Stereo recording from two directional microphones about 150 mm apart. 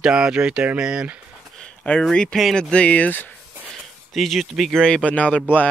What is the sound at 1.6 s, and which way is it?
Speech, 5° left (ahead or behind).